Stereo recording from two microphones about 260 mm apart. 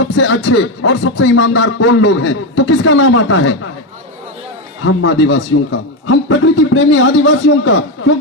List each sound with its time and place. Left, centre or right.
0.0 s a man's voice: left
4.9 s a man's voice: left